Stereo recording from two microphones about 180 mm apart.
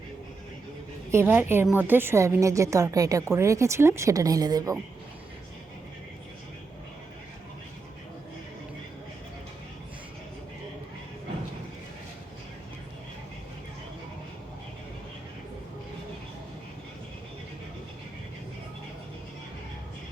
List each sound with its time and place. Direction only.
1.1 s a woman's voice: 10° right (ahead or behind)